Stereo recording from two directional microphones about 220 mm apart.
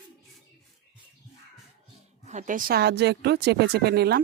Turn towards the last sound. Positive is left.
turn(degrees=-45)  # may be behind; listen again after turning